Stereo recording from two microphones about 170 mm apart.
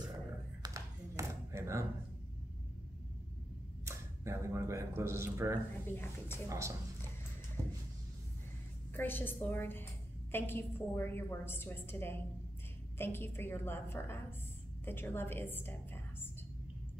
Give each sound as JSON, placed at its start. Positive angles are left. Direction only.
{"t": 0.6, "sound": "tap", "side_deg": -20}
{"t": 3.8, "sound": "speech", "side_deg": -15}
{"t": 5.9, "sound": "a woman's voice", "side_deg": 15}
{"t": 7.6, "sound": "a sound", "side_deg": -15}
{"t": 8.9, "sound": "a woman's voice", "side_deg": 10}